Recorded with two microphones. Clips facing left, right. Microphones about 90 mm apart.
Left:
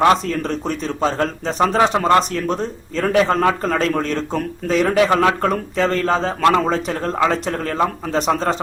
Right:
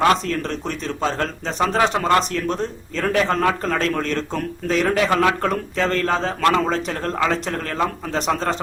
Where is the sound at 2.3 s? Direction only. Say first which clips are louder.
Left 2 dB; 5° left (ahead or behind).